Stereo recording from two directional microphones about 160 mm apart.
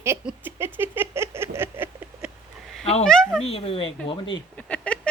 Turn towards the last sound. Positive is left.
turn(degrees=10)  # may be behind; listen again after turning